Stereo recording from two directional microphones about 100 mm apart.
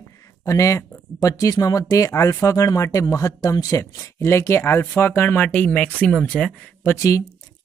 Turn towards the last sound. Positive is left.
turn(degrees=30)  # may be behind; listen again after turning